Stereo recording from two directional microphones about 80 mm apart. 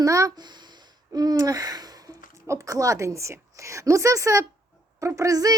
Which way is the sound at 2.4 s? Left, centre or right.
Right.